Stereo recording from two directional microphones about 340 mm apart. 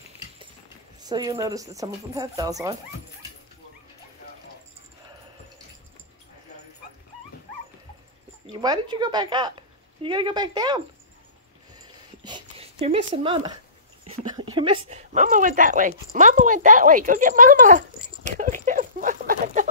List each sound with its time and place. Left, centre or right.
1.0 s speech: centre
8.5 s a woman's voice: centre
12.2 s a sound: centre
14.9 s speech: right